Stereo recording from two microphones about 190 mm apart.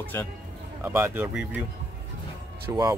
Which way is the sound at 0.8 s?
10° right (ahead or behind).